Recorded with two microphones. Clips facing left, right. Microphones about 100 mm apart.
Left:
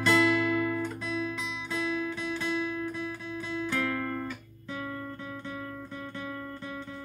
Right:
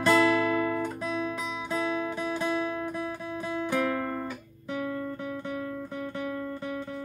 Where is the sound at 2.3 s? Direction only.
15° right (ahead or behind).